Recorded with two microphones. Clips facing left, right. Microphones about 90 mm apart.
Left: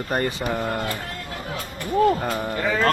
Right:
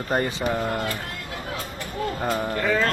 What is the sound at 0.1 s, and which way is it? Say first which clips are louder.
Speech: even; 20° right (ahead or behind).